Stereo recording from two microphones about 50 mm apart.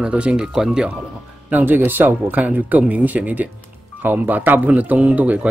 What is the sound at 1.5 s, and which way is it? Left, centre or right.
Speech, right.